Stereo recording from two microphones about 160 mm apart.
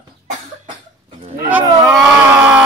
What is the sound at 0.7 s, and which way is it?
Cough, 45° right (ahead or behind).